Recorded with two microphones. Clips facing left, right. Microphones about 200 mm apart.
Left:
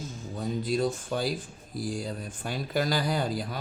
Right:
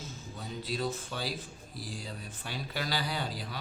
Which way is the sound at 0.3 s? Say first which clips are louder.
Left 8 dB; 45° left (ahead or behind).